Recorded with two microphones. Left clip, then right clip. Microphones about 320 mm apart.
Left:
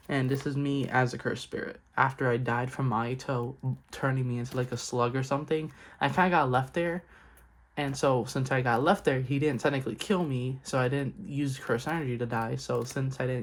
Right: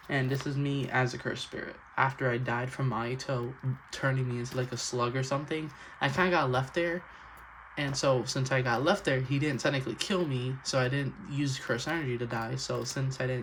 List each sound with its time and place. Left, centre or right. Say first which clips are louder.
0.1 s speech: left 1 dB; centre